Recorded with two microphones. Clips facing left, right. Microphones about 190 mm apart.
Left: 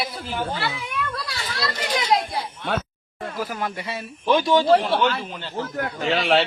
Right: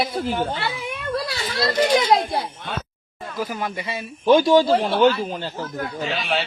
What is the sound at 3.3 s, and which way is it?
Speech, centre (ahead or behind).